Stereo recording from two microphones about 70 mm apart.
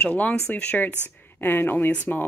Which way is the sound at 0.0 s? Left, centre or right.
Centre.